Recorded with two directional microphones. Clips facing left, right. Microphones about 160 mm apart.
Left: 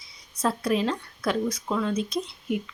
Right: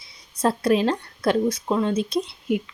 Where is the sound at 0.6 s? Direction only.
80° right.